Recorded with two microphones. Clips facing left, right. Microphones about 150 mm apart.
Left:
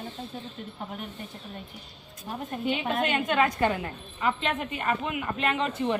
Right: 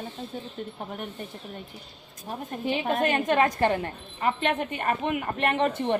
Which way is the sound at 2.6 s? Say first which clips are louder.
Right 3 dB; 40° right (ahead or behind).